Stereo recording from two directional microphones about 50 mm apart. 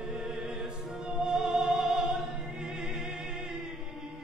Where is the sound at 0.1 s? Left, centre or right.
Centre.